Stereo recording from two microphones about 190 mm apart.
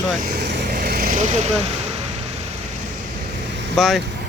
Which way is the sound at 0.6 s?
50° right (ahead or behind).